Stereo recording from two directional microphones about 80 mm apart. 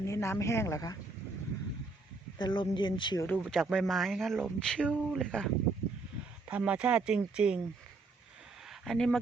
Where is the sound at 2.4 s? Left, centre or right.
Left.